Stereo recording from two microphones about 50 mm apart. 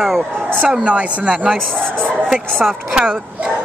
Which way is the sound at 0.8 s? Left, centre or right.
Right.